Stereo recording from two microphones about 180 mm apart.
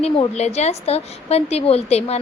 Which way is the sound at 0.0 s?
35° left (ahead or behind).